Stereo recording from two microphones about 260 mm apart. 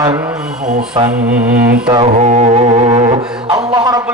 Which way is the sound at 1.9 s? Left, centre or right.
Right.